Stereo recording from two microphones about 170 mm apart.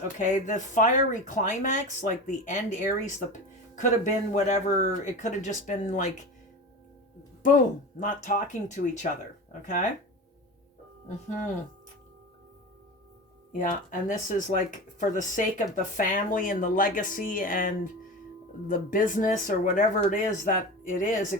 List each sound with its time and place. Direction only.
0.2 s speech: 45° left (ahead or behind)
7.4 s speech: 50° left (ahead or behind)
13.6 s speech: 50° left (ahead or behind)